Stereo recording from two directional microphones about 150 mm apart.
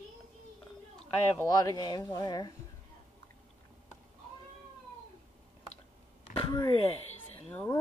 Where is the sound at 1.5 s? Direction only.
25° left (ahead or behind).